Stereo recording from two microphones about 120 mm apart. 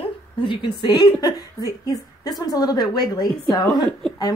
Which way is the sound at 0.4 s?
45° left (ahead or behind).